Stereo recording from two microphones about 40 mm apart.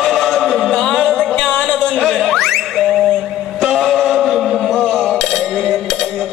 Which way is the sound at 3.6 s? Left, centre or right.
Centre.